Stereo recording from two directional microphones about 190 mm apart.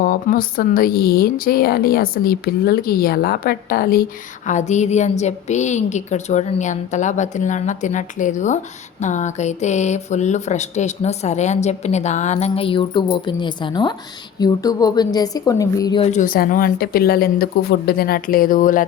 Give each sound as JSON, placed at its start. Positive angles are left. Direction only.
{"t": 0.0, "sound": "speech", "side_deg": 50}
{"t": 4.4, "sound": "a woman's voice", "side_deg": 40}
{"t": 16.0, "sound": "speech", "side_deg": 40}